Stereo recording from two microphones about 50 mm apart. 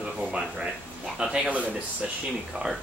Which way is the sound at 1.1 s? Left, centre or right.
Centre.